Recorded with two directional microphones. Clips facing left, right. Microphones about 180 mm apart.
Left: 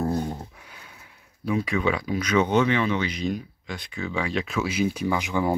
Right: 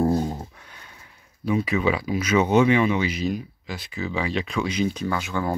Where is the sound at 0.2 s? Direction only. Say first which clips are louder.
Right 3 dB; 15° right (ahead or behind).